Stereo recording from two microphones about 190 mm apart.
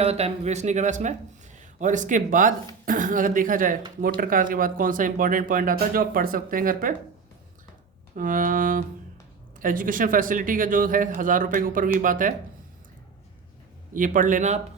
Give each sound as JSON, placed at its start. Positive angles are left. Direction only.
{"t": 0.0, "sound": "speech", "side_deg": -30}
{"t": 8.1, "sound": "speech", "side_deg": -45}
{"t": 13.9, "sound": "speech", "side_deg": -45}